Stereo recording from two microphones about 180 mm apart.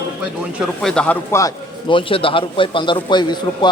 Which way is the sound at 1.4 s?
25° left (ahead or behind).